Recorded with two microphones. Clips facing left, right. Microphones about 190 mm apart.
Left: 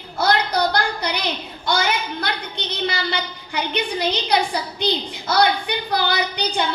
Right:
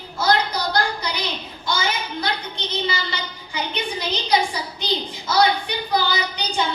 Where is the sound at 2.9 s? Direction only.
60° left (ahead or behind).